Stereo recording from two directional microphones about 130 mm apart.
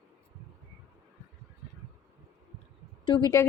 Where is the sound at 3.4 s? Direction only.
25° left (ahead or behind).